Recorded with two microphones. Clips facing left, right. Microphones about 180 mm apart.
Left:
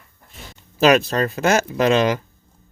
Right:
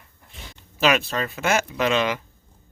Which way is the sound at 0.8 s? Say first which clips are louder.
Left 6 dB; 40° left (ahead or behind).